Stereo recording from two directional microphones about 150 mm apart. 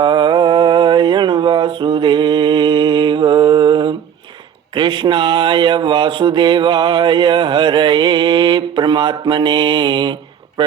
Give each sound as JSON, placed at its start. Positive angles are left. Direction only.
{"t": 0.0, "sound": "mantra", "side_deg": -30}
{"t": 4.7, "sound": "speech", "side_deg": -30}